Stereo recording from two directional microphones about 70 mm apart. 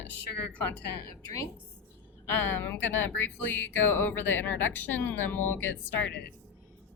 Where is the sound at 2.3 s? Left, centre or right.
Left.